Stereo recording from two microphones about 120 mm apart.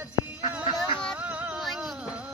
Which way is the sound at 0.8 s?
5° left (ahead or behind).